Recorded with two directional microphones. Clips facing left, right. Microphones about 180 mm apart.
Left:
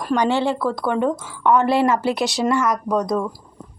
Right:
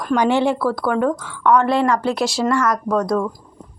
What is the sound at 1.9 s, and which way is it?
A woman's voice, 5° left (ahead or behind).